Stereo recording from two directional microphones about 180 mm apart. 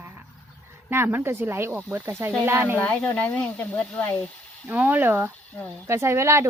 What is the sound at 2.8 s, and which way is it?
Speech, 10° left (ahead or behind).